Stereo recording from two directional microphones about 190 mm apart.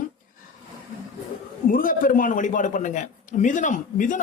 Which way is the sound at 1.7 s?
45° left (ahead or behind).